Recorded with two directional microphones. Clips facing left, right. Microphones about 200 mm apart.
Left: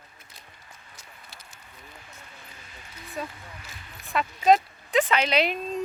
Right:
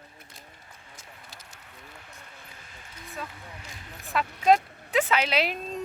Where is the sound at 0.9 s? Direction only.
45° right (ahead or behind).